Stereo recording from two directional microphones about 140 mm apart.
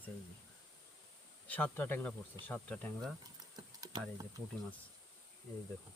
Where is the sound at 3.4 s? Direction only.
25° right (ahead or behind).